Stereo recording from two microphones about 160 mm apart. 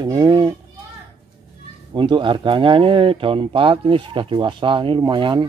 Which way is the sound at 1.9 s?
30° right (ahead or behind).